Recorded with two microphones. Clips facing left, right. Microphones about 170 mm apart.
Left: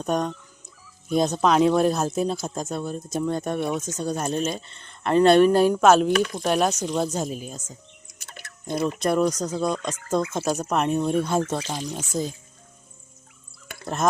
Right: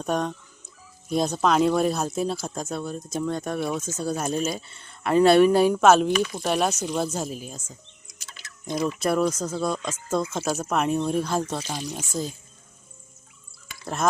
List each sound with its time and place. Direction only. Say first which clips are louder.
0.0 s dog: left 1 dB; centre (ahead or behind)
1.1 s speech: left 2 dB; centre (ahead or behind)
8.0 s chewing: left 3 dB; 55° left (ahead or behind)
9.0 s speech: left 2 dB; 5° right (ahead or behind)
13.8 s speech: left 1 dB; centre (ahead or behind)